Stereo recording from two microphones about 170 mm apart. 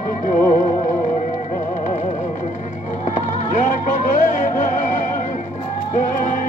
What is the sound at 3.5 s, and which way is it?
Music, 45° left (ahead or behind).